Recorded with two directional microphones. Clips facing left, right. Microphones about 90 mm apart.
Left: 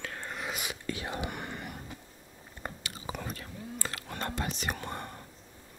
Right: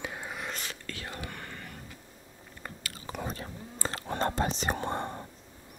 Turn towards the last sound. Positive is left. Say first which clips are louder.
# right 5 dB
turn(degrees=-30)  # may be behind; listen again after turning